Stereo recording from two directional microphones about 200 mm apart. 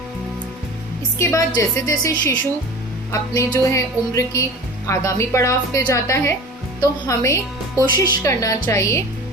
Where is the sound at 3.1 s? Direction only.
15° left (ahead or behind).